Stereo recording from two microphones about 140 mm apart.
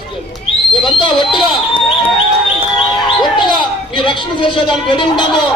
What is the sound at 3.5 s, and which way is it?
A man's voice, 35° left (ahead or behind).